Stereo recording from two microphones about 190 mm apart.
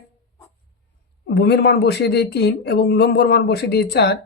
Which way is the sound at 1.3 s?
60° left (ahead or behind).